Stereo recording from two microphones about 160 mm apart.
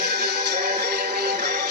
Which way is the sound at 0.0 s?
80° right.